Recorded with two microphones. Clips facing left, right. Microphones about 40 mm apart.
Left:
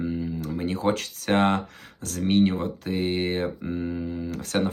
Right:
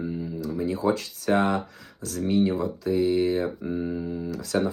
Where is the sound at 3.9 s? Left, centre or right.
Left.